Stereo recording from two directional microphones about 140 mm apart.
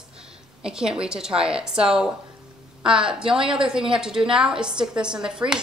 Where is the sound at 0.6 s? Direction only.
5° right (ahead or behind).